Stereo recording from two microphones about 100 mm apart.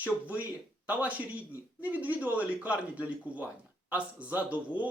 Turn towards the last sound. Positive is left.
turn(degrees=-15)  # may be behind; listen again after turning